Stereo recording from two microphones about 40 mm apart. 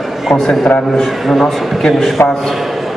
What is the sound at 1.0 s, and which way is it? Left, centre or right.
A man's voice, centre.